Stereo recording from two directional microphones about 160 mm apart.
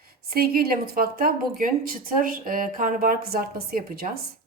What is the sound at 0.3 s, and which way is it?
Speech, 70° right (ahead or behind).